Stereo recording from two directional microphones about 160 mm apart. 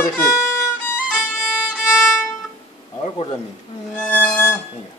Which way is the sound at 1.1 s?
5° right (ahead or behind).